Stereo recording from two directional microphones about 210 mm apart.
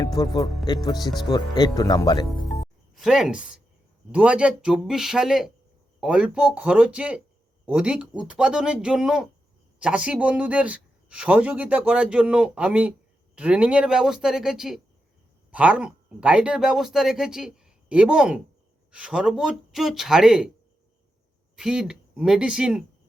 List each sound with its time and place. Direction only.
0.2 s speech: 15° left (ahead or behind)
2.9 s a man's voice: centre (ahead or behind)
21.5 s speech: 5° right (ahead or behind)